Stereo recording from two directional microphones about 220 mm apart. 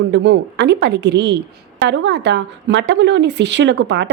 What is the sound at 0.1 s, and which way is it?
Speech, 55° right (ahead or behind).